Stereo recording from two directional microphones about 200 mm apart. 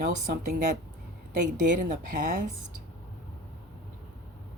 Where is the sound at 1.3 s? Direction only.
40° right (ahead or behind).